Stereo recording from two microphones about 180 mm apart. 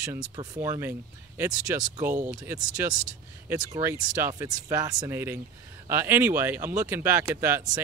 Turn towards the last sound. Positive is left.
turn(degrees=-15)  # may be behind; listen again after turning